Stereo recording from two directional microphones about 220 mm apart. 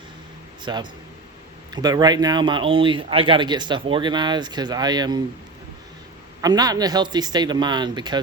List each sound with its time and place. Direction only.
0.6 s a man's voice: 20° right (ahead or behind)
6.4 s a man's voice: 15° right (ahead or behind)